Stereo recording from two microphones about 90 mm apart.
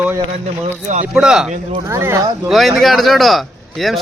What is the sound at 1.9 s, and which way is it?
Speech, 30° right (ahead or behind).